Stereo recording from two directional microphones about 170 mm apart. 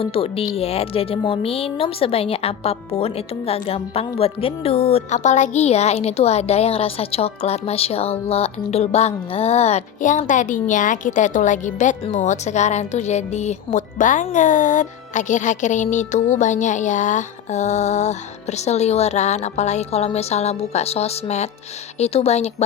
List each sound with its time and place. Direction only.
0.0 s speech: 35° left (ahead or behind)